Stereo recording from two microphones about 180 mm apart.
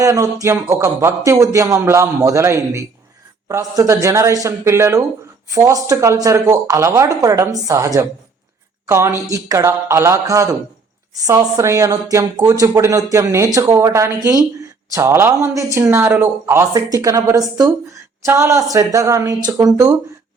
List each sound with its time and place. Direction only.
0.0 s speech: 15° right (ahead or behind)